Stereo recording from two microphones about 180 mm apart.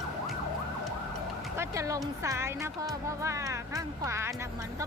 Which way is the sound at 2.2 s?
15° right (ahead or behind).